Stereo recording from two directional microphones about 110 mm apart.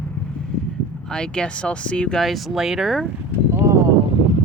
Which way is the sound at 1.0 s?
10° left (ahead or behind).